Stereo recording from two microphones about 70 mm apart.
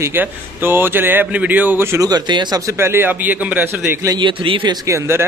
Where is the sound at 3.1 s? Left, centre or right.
Right.